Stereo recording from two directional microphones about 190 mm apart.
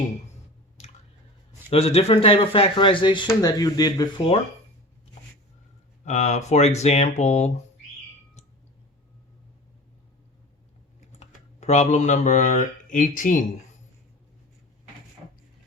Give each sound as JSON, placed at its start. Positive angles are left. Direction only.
{"t": 1.7, "sound": "speech", "side_deg": 30}
{"t": 6.1, "sound": "speech", "side_deg": 35}
{"t": 11.2, "sound": "speech", "side_deg": 35}